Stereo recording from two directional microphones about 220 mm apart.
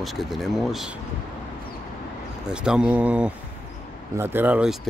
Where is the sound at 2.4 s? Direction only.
5° right (ahead or behind).